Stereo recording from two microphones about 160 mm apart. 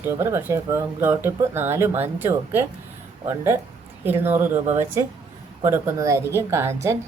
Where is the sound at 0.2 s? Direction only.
15° right (ahead or behind).